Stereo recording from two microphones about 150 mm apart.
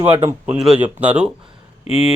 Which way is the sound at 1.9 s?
40° left (ahead or behind).